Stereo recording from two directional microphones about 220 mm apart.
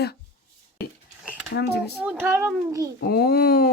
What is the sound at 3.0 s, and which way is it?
Speech, 45° left (ahead or behind).